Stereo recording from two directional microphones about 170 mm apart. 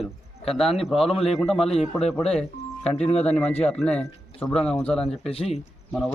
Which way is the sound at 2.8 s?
40° left (ahead or behind).